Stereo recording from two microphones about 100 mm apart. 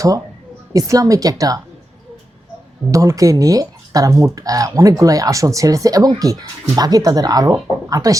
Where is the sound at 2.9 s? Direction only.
30° right (ahead or behind).